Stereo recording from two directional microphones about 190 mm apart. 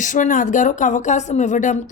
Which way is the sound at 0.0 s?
40° left (ahead or behind).